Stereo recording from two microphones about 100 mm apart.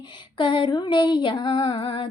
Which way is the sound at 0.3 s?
55° left (ahead or behind).